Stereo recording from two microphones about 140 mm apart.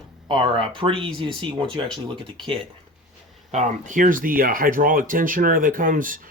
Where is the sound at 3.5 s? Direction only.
60° right (ahead or behind).